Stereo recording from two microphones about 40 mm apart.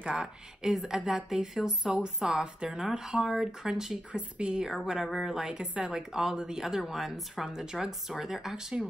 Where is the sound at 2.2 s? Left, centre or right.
Centre.